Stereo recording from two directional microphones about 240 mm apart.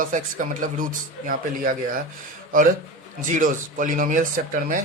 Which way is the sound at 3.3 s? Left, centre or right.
Right.